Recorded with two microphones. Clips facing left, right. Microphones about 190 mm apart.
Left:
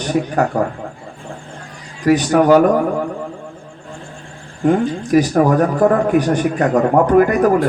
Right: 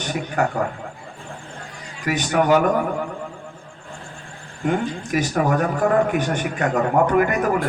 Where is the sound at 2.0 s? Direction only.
35° left (ahead or behind).